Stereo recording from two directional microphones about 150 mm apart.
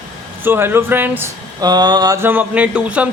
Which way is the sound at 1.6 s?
30° right (ahead or behind).